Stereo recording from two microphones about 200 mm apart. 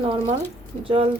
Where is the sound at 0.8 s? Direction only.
25° right (ahead or behind).